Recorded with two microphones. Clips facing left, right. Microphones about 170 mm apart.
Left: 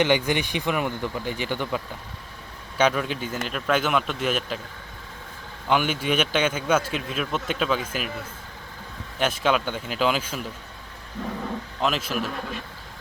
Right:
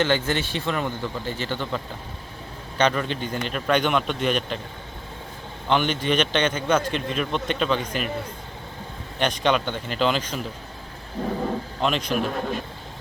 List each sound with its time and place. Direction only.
0.0 s a man's voice: 15° left (ahead or behind)
5.6 s a man's voice: 5° left (ahead or behind)
9.1 s speech: 5° left (ahead or behind)
11.2 s speech: 30° right (ahead or behind)
11.8 s speech: 5° left (ahead or behind)